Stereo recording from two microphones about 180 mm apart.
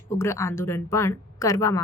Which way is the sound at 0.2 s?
15° left (ahead or behind).